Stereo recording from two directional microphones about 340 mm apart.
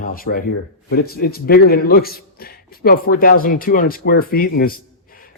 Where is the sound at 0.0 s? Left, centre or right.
Left.